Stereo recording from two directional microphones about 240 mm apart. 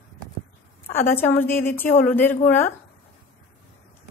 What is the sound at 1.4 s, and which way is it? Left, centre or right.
Speech, left.